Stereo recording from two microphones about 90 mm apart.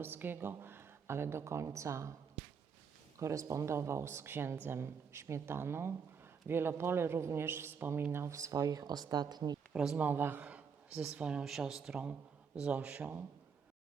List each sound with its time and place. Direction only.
0.0 s speech: 25° right (ahead or behind)
3.2 s speech: 35° right (ahead or behind)
9.7 s speech: 5° right (ahead or behind)
10.0 s speech: 25° right (ahead or behind)